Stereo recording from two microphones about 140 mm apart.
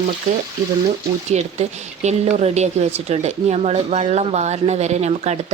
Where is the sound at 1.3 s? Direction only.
55° right (ahead or behind).